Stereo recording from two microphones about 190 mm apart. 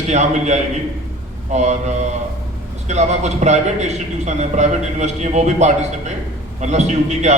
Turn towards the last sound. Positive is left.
turn(degrees=-35)  # may be behind; listen again after turning